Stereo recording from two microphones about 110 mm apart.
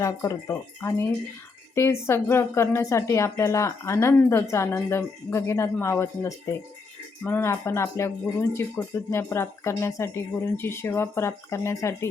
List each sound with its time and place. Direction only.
0.0 s a woman's voice: 30° left (ahead or behind)